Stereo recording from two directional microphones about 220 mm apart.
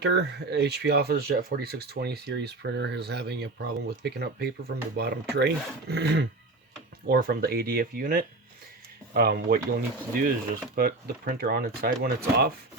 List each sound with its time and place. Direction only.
0.0 s speech: 50° right (ahead or behind)